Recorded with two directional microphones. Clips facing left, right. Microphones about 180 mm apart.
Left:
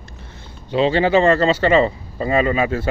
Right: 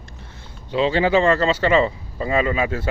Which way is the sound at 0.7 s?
60° left (ahead or behind).